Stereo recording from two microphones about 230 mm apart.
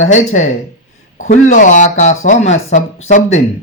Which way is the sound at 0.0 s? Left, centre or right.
Left.